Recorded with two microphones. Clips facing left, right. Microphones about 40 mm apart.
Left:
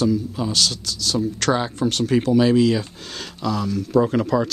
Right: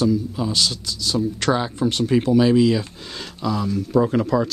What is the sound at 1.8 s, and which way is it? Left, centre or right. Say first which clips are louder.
Speech: even; centre.